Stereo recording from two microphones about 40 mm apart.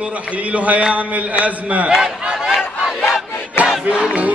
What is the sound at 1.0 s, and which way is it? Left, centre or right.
Music, right.